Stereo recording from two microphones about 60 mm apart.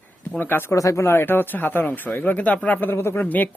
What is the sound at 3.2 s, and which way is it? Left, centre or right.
Speech, left.